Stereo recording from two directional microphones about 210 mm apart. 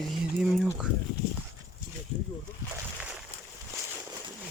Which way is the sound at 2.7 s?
5° right (ahead or behind).